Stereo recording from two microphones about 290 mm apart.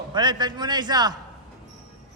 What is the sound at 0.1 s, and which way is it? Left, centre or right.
A man's voice, centre.